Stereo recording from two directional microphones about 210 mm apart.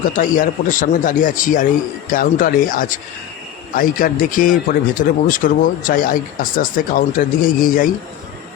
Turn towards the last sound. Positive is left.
turn(degrees=40)  # may be behind; listen again after turning